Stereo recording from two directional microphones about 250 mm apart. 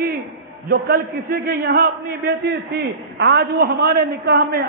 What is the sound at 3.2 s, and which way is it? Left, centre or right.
A man's voice, right.